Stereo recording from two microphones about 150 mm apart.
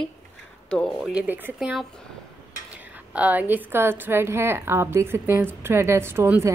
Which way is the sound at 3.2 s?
10° right (ahead or behind).